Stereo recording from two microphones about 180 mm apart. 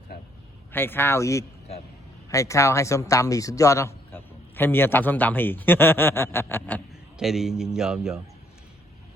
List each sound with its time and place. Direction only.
0.1 s a sound: 60° left (ahead or behind)
0.7 s speech: 10° left (ahead or behind)
7.2 s a man's voice: 5° right (ahead or behind)